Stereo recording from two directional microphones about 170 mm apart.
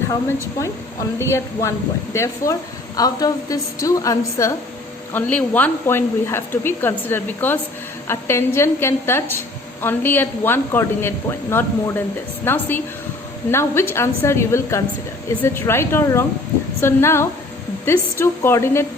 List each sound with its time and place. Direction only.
1.2 s a woman's voice: 15° left (ahead or behind)